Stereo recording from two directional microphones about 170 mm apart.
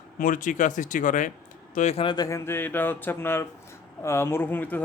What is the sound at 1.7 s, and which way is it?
Speech, 40° left (ahead or behind).